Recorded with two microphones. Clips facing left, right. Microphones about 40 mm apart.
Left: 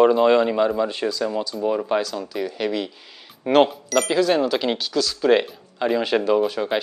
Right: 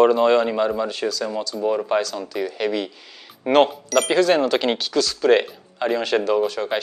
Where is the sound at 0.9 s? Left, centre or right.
Left.